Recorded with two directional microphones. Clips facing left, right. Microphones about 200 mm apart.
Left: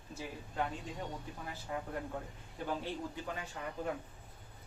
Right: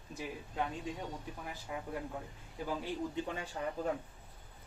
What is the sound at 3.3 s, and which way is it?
Speech, 35° right (ahead or behind).